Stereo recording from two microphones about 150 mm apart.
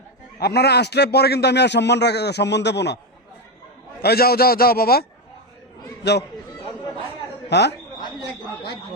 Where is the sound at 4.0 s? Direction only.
90° left.